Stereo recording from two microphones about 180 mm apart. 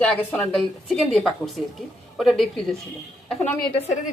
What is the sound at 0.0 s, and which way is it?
Speech, 10° left (ahead or behind).